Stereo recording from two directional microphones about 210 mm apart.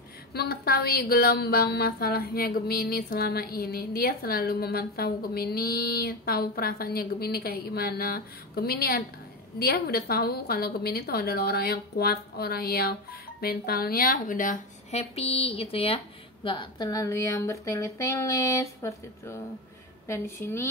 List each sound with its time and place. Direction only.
0.3 s a woman's voice: 50° left (ahead or behind); by 20.6 s 10° left (ahead or behind)